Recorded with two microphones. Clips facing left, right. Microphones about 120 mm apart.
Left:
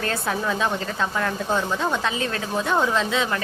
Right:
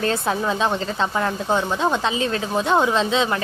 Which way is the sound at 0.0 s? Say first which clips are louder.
Right 4 dB; 25° right (ahead or behind).